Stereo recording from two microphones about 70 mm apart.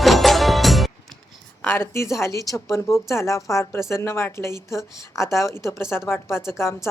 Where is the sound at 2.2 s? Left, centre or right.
Left.